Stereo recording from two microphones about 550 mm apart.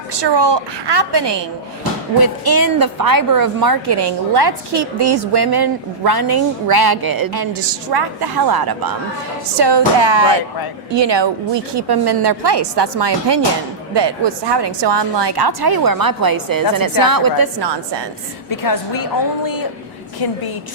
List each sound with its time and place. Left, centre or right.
0.1 s a woman's voice: right
18.5 s a woman's voice: left
20.1 s a woman's voice: left